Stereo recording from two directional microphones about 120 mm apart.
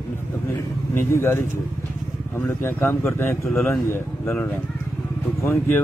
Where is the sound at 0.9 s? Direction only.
20° left (ahead or behind).